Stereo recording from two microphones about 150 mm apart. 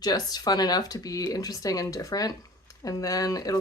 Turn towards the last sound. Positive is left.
turn(degrees=25)  # may be behind; listen again after turning